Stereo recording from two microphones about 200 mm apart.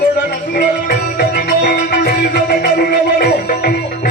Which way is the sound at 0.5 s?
50° left (ahead or behind).